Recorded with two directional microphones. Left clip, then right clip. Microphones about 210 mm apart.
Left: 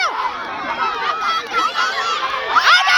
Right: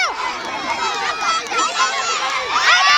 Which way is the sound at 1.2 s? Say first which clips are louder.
Right 1 dB; 45° left (ahead or behind).